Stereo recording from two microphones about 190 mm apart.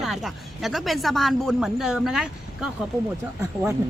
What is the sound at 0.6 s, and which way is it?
Speech, centre (ahead or behind).